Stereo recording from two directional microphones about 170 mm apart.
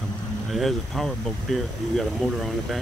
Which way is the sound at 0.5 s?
Centre (ahead or behind).